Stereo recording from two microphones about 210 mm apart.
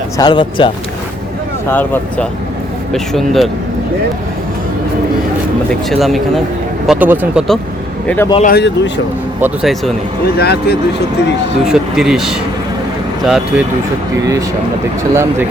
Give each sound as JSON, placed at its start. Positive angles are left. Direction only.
{"t": 0.2, "sound": "speech", "side_deg": 20}
{"t": 1.7, "sound": "speech", "side_deg": 10}
{"t": 5.9, "sound": "speech", "side_deg": 0}
{"t": 8.0, "sound": "speech", "side_deg": 10}
{"t": 8.4, "sound": "speech", "side_deg": 50}
{"t": 9.4, "sound": "speech", "side_deg": -5}
{"t": 10.3, "sound": "speech", "side_deg": 50}
{"t": 11.6, "sound": "speech", "side_deg": 0}
{"t": 15.1, "sound": "speech", "side_deg": -15}